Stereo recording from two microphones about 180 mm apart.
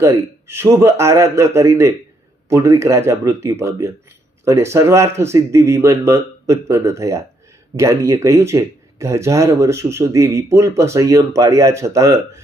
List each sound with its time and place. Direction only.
0.0 s speech: 15° right (ahead or behind)